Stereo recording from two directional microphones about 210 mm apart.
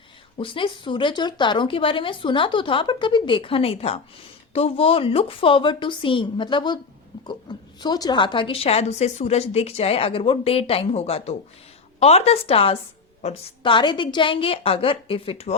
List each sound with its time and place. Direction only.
0.3 s a woman's voice: 25° left (ahead or behind)